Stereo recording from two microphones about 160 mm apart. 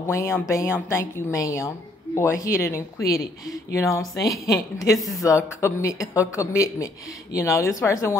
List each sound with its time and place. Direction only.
0.0 s a woman's voice: 15° left (ahead or behind)
4.9 s speech: centre (ahead or behind)
5.2 s a woman's voice: 20° left (ahead or behind)